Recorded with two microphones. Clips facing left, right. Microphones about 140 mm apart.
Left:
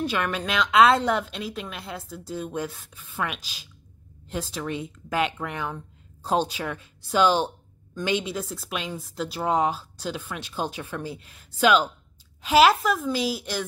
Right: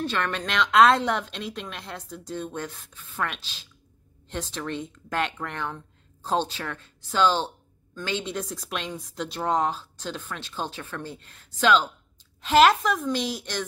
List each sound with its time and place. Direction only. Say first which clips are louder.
0.0 s a woman's voice: left 1 dB; 10° left (ahead or behind)